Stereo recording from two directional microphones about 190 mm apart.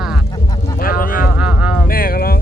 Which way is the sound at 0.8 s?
45° left (ahead or behind).